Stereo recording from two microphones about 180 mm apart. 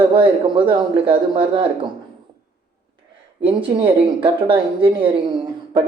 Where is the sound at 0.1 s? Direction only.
30° right (ahead or behind).